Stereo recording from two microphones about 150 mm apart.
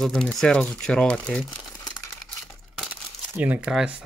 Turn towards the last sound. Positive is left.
turn(degrees=-5)  # may be behind; listen again after turning